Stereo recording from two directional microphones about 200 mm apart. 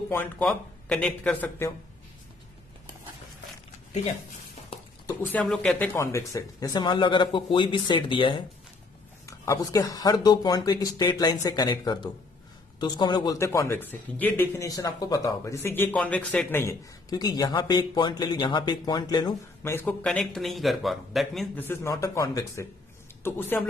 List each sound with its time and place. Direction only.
0.1 s speech: 5° left (ahead or behind)
5.0 s speech: 10° left (ahead or behind)
5.9 s speech: 15° left (ahead or behind)
21.6 s speech: 15° left (ahead or behind)